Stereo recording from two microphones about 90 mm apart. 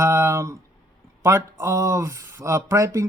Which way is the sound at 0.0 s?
30° right (ahead or behind).